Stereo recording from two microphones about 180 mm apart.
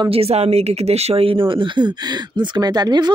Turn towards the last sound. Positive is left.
turn(degrees=-25)  # may be behind; listen again after turning